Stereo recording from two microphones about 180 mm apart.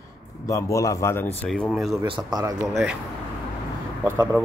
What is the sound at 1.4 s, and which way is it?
Speech, 5° left (ahead or behind).